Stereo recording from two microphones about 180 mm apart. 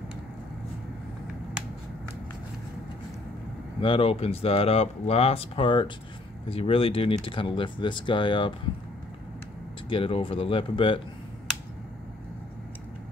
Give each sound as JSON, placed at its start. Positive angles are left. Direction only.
{"t": 3.8, "sound": "speech", "side_deg": 30}
{"t": 9.8, "sound": "speech", "side_deg": 30}